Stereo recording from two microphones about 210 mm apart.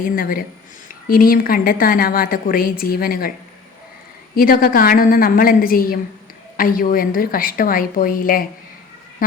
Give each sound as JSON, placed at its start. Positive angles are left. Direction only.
{"t": 0.2, "sound": "a woman's voice", "side_deg": 45}
{"t": 4.4, "sound": "a woman's voice", "side_deg": 45}